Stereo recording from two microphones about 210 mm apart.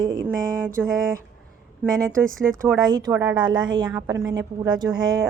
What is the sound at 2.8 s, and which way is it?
A woman's voice, 20° right (ahead or behind).